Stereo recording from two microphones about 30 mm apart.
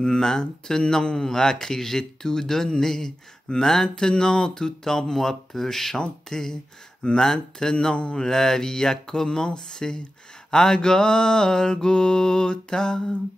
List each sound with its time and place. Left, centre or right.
0.0 s mantra: left
1.0 s speech: centre
5.9 s mantra: centre
7.9 s mantra: left
8.2 s mantra: centre